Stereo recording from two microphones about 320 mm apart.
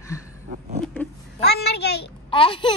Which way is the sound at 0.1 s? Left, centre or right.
Centre.